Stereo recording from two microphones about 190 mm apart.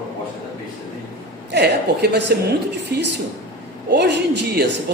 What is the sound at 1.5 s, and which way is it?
A man's voice, 60° right (ahead or behind).